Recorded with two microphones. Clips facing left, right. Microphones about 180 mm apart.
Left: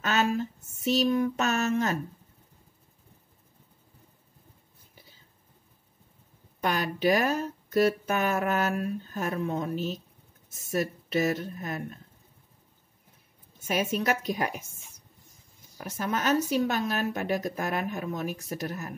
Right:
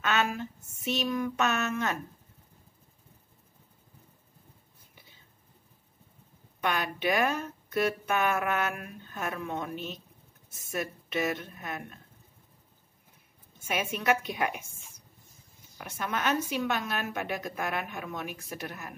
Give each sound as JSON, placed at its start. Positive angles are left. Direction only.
{"t": 0.0, "sound": "a sound", "side_deg": 35}
{"t": 0.7, "sound": "speech", "side_deg": 35}
{"t": 6.6, "sound": "speech", "side_deg": 40}
{"t": 13.7, "sound": "speech", "side_deg": 35}
{"t": 15.8, "sound": "speech", "side_deg": 35}